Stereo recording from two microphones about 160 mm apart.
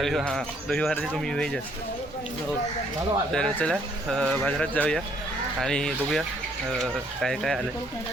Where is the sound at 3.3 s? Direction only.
5° left (ahead or behind).